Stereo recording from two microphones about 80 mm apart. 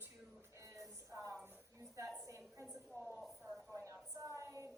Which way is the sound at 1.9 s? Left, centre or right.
Right.